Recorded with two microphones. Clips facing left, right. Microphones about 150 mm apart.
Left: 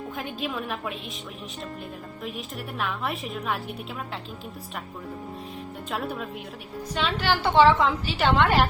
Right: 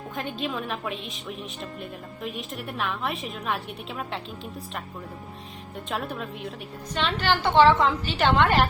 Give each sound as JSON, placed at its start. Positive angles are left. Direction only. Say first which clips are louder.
{"t": 0.2, "sound": "a woman's voice", "louder": "right 2 dB", "side_deg": 5}
{"t": 2.2, "sound": "a woman's voice", "louder": "right 2 dB", "side_deg": 0}
{"t": 5.9, "sound": "a woman's voice", "louder": "even", "side_deg": 0}